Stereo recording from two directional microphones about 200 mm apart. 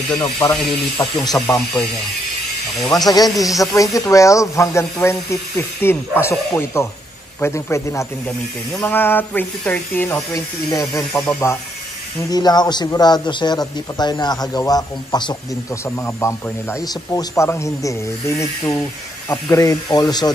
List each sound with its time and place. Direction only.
0.1 s a man's voice: 15° left (ahead or behind)
2.8 s a man's voice: 15° left (ahead or behind)